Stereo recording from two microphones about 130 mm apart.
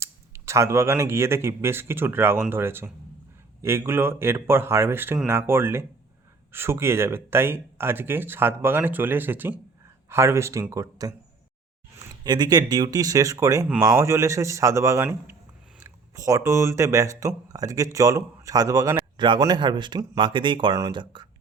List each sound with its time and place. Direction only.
0.0 s speech: 20° right (ahead or behind)
12.2 s speech: 35° right (ahead or behind)